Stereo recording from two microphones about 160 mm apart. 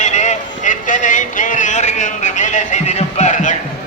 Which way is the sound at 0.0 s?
50° left (ahead or behind).